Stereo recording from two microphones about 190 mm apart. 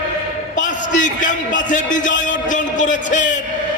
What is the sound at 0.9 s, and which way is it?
A man's voice, 40° left (ahead or behind).